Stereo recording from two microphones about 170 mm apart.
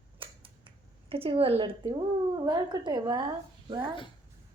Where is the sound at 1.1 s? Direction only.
35° right (ahead or behind).